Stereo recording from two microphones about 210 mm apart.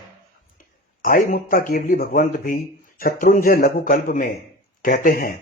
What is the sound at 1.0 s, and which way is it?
Speech, 40° left (ahead or behind).